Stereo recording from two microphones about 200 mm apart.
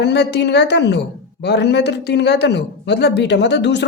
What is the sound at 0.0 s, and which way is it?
A woman's voice, 60° left (ahead or behind).